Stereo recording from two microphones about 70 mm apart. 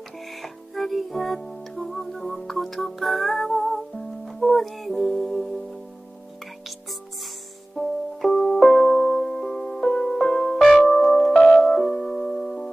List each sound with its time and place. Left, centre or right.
0.2 s music: centre
7.7 s music: centre